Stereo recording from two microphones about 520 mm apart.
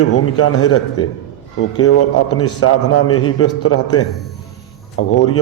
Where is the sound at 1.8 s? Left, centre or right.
Left.